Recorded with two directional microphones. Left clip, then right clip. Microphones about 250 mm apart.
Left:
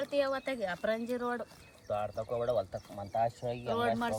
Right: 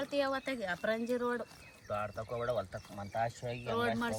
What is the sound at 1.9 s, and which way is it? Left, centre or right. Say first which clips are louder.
Speech: left 3 dB; left.